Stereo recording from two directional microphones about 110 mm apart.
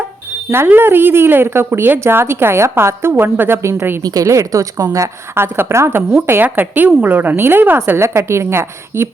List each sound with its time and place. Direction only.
0.5 s speech: 20° right (ahead or behind)
4.0 s a woman's voice: 35° right (ahead or behind)